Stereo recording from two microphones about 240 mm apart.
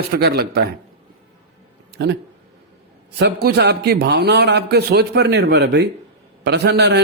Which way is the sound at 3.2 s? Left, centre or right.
Right.